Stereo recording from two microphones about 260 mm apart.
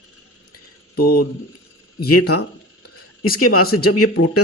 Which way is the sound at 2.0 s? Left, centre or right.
Left.